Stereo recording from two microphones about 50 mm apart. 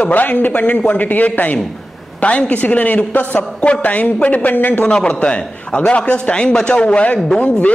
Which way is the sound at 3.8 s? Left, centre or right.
Left.